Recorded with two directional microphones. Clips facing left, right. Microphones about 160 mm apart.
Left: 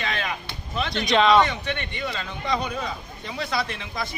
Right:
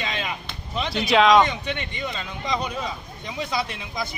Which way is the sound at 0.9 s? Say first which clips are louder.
Right 2 dB; 5° right (ahead or behind).